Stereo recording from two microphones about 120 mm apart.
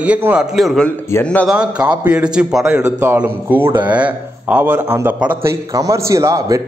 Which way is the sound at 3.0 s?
15° right (ahead or behind).